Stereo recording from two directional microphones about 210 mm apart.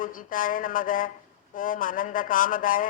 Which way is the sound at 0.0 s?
40° left (ahead or behind).